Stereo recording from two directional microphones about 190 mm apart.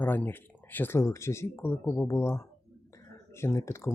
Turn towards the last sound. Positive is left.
turn(degrees=15)  # may be behind; listen again after turning